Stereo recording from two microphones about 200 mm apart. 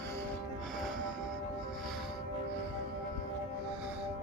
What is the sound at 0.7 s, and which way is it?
Music, centre (ahead or behind).